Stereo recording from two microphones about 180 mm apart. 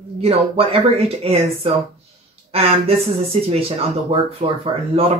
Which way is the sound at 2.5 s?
35° right (ahead or behind).